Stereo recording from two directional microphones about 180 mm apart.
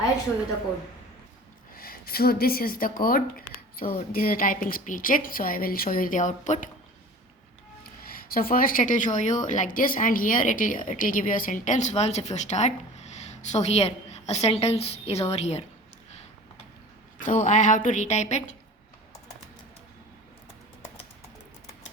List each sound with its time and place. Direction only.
1.7 s a woman's voice: 55° left (ahead or behind)
7.9 s a woman's voice: 55° left (ahead or behind); by 15.6 s 35° left (ahead or behind)
17.2 s a woman's voice: 50° left (ahead or behind)